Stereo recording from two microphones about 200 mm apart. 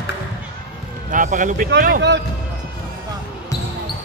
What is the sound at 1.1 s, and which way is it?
Speech, 40° right (ahead or behind).